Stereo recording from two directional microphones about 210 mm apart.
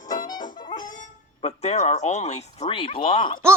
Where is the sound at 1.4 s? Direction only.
30° left (ahead or behind).